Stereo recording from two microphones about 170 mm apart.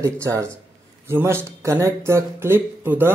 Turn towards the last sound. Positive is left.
turn(degrees=-10)  # may be behind; listen again after turning